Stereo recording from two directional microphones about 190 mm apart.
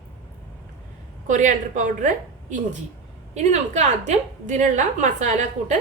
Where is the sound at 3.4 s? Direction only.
40° right (ahead or behind).